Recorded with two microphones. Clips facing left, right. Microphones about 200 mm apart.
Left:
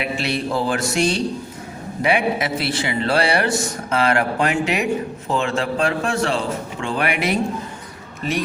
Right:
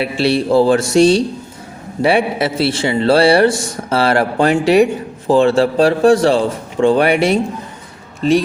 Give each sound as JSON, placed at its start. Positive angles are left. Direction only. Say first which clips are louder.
{"t": 0.0, "sound": "a man's voice", "louder": "right 8 dB", "side_deg": -30}